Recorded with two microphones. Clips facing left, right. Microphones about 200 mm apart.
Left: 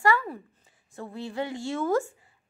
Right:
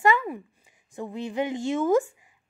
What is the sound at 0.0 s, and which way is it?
A woman's voice, 20° right (ahead or behind).